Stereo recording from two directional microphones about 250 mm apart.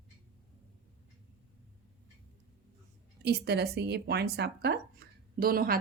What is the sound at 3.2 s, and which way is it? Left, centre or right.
Speech, right.